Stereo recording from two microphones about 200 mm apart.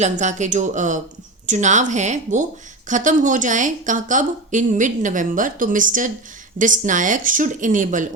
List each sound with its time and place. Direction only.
0.0 s a woman's voice: 35° right (ahead or behind)